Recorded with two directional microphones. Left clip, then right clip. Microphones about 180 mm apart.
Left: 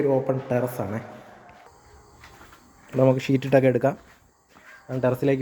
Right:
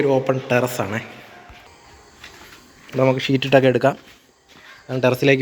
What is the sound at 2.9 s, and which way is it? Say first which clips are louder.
Speech: right 2 dB; 15° left (ahead or behind).